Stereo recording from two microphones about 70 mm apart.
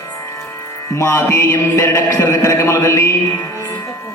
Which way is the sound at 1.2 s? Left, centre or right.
Left.